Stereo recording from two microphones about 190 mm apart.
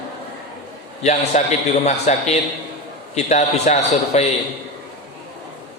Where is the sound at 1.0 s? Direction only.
35° left (ahead or behind).